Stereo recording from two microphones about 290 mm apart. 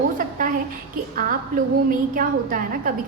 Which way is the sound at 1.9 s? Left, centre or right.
Right.